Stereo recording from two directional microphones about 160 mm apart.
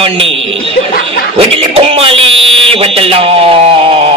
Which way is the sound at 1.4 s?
35° right (ahead or behind).